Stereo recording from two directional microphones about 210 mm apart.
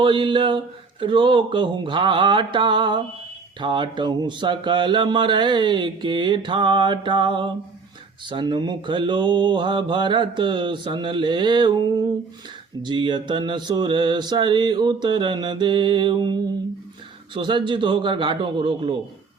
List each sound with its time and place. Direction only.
0.0 s speech: 25° right (ahead or behind)